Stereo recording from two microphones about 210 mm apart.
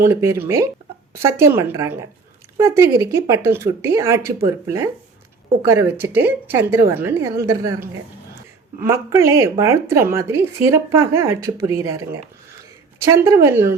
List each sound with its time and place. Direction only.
0.0 s speech: 10° right (ahead or behind)
13.2 s speech: 15° right (ahead or behind)